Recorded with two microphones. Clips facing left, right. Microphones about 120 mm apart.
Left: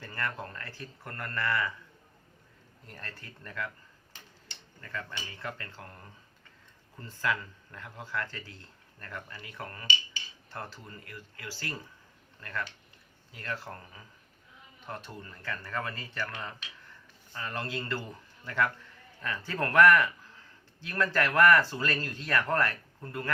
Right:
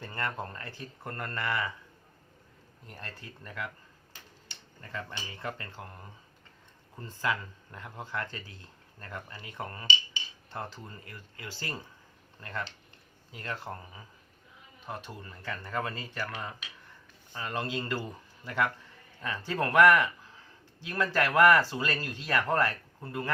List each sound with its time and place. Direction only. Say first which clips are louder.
0.0 s speech: right 1 dB; 25° right (ahead or behind)
2.8 s speech: right 1 dB; 15° right (ahead or behind)
4.8 s speech: even; 20° right (ahead or behind)